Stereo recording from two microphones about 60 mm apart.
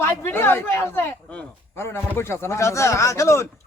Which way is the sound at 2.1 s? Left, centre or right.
Left.